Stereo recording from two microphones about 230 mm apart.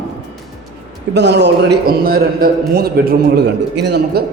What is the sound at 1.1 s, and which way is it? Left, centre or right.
A man's voice, right.